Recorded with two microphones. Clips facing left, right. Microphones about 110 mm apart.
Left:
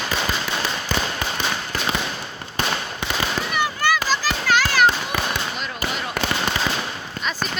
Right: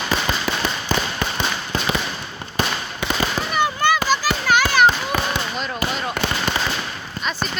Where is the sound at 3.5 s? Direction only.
25° right (ahead or behind).